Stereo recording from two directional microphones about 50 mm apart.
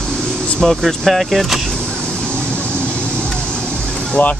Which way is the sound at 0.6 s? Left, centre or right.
Centre.